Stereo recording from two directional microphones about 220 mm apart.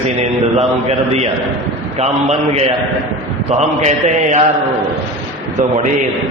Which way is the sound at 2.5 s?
25° right (ahead or behind).